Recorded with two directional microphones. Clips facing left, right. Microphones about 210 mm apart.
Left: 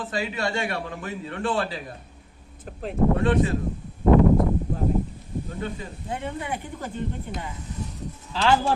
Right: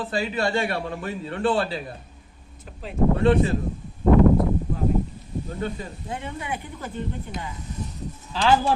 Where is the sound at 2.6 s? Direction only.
55° left (ahead or behind).